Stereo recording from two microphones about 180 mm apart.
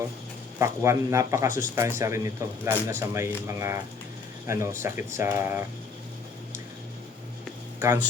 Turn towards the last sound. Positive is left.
turn(degrees=-15)  # may be behind; listen again after turning